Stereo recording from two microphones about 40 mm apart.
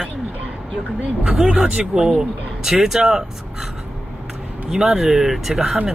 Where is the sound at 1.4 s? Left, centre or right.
Right.